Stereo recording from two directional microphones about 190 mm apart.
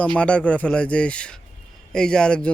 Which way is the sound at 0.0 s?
5° left (ahead or behind).